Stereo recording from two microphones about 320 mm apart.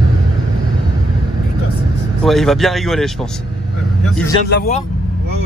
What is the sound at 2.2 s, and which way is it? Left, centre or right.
Speech, centre.